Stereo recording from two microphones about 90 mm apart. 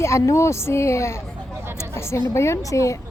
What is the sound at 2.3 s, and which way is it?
Speech, 35° left (ahead or behind).